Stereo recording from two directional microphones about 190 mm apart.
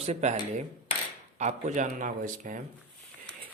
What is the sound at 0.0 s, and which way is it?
Speech, 35° right (ahead or behind).